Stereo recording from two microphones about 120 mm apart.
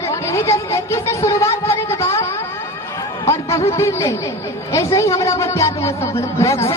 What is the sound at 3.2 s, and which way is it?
A man's voice, 25° left (ahead or behind).